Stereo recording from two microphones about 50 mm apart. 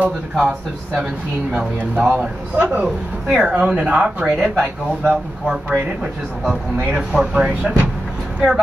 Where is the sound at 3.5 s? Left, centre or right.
Centre.